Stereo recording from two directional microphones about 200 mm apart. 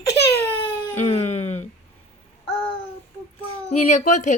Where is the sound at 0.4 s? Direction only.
10° left (ahead or behind).